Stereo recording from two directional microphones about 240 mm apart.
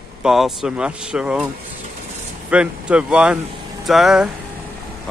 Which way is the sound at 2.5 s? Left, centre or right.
Centre.